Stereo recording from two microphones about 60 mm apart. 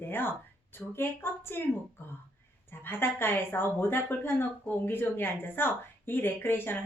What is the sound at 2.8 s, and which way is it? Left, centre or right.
Speech, left.